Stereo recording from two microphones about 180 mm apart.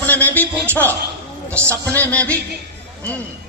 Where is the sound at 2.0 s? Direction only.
10° left (ahead or behind).